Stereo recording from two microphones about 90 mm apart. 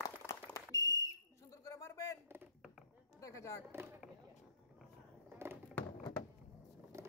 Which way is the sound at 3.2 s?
35° left (ahead or behind).